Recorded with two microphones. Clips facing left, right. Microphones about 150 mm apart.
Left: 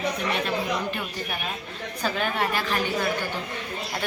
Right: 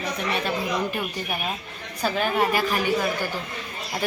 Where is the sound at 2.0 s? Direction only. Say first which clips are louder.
Right 4 dB; 5° right (ahead or behind).